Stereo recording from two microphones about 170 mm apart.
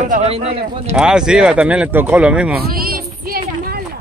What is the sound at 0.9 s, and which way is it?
Speech, 5° right (ahead or behind).